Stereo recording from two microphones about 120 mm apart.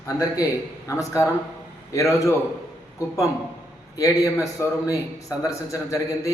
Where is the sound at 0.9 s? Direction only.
25° left (ahead or behind).